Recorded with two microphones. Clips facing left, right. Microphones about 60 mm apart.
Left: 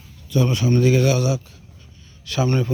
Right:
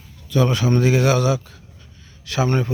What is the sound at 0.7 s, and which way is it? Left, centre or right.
Speech, right.